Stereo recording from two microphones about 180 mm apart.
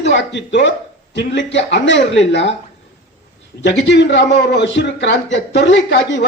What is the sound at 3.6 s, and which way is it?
A man's voice, 75° left (ahead or behind).